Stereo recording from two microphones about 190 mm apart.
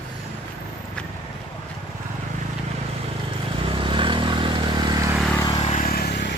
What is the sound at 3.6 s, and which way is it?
Vehicle, 25° right (ahead or behind).